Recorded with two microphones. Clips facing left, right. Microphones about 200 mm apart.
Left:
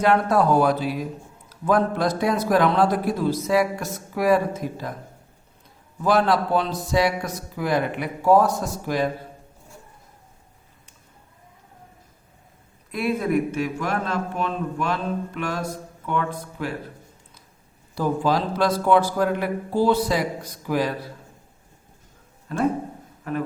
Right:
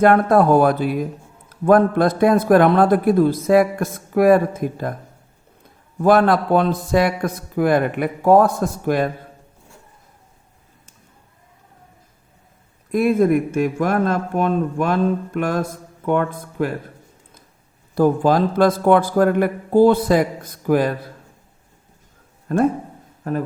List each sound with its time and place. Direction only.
0.0 s a man's voice: 55° right (ahead or behind)
6.0 s speech: 55° right (ahead or behind)
12.9 s a man's voice: 50° right (ahead or behind)
17.9 s a man's voice: 50° right (ahead or behind)
22.4 s a man's voice: 50° right (ahead or behind)